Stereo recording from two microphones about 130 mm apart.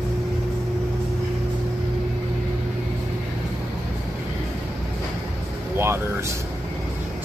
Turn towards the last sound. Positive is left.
turn(degrees=-20)  # may be behind; listen again after turning